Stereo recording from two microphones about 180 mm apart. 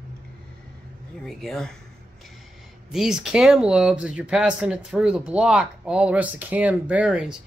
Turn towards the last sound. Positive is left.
turn(degrees=-5)  # may be behind; listen again after turning